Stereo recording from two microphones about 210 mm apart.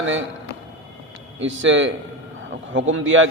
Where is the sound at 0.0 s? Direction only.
65° right (ahead or behind).